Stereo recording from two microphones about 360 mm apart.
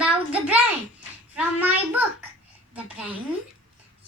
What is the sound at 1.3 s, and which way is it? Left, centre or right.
A woman's voice, centre.